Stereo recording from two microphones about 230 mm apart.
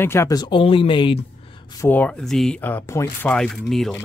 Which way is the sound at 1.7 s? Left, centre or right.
Centre.